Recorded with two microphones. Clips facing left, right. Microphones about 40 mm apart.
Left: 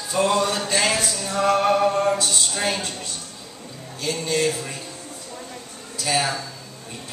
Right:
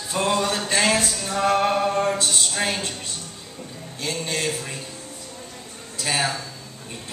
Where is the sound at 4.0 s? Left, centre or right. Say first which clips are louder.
Left 4 dB; right.